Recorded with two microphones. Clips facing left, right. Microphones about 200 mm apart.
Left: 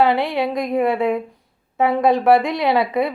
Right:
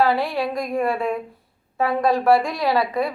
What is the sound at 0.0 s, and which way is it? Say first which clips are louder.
A woman's voice: left 3 dB; 20° left (ahead or behind).